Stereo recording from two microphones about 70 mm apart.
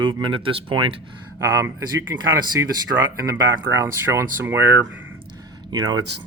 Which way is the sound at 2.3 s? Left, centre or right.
Right.